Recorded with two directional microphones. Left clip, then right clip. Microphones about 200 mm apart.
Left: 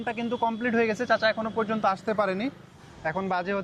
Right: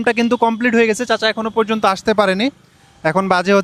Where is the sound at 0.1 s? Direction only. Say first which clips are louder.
Right 12 dB; 90° right; by 2.5 s 55° right (ahead or behind).